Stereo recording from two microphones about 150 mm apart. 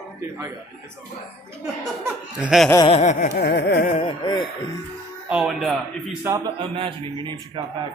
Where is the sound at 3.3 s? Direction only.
90° left.